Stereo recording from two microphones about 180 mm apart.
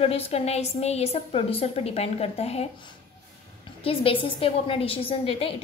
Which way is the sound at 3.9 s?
30° left (ahead or behind).